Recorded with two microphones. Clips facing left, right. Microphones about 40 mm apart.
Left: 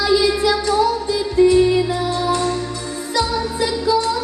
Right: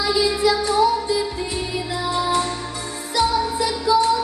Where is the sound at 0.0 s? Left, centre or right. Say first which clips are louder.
Left 3 dB; left.